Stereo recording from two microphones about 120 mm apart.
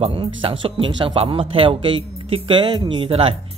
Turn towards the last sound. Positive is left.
turn(degrees=-50)  # may be behind; listen again after turning